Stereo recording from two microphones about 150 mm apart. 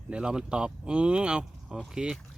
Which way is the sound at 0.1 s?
5° right (ahead or behind).